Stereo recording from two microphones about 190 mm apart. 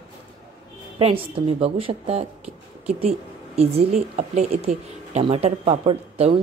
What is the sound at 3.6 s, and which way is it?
A woman's voice, 35° right (ahead or behind).